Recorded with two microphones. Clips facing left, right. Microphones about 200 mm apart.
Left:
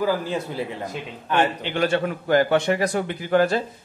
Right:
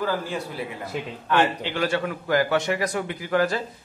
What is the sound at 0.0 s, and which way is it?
Speech, 10° left (ahead or behind).